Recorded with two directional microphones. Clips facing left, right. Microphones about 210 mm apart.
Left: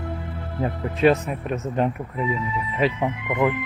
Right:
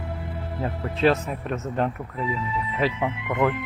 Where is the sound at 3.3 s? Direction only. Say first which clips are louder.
Left 1 dB; centre (ahead or behind).